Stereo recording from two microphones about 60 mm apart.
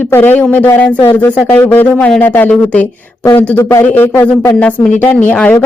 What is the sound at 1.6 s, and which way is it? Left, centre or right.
A woman's voice, left.